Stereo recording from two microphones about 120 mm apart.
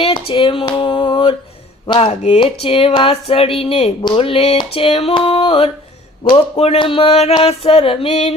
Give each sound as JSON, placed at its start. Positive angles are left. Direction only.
{"t": 0.0, "sound": "a sound", "side_deg": 50}
{"t": 1.9, "sound": "speech", "side_deg": 45}
{"t": 4.7, "sound": "female singing", "side_deg": 60}
{"t": 5.1, "sound": "speech", "side_deg": 45}
{"t": 8.1, "sound": "female singing", "side_deg": 70}